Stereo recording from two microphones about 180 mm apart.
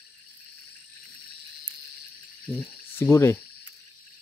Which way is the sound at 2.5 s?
5° left (ahead or behind).